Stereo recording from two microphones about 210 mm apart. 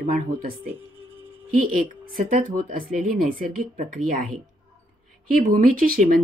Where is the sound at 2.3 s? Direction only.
40° right (ahead or behind).